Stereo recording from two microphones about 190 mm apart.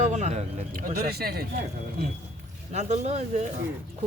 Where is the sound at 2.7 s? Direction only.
35° right (ahead or behind).